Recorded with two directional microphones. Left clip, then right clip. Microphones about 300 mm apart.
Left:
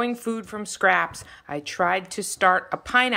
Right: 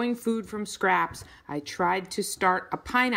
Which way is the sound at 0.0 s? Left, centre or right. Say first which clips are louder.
Left 2 dB; centre.